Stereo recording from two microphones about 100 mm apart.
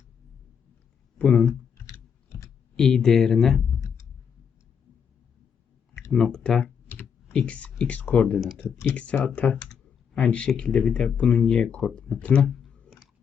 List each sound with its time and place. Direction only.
1.2 s speech: 10° left (ahead or behind)
1.5 s clicking: 25° left (ahead or behind)
2.7 s speech: 5° left (ahead or behind)
3.8 s clicking: 30° left (ahead or behind)
6.1 s speech: 5° left (ahead or behind)
6.8 s computer keyboard: 15° left (ahead or behind)
8.8 s speech: 15° left (ahead or behind)
12.6 s clicking: centre (ahead or behind)